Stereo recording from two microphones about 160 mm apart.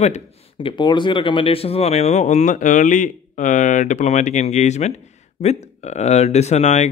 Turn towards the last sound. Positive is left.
turn(degrees=45)  # may be behind; listen again after turning